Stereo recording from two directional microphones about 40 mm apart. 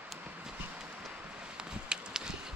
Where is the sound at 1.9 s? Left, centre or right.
Right.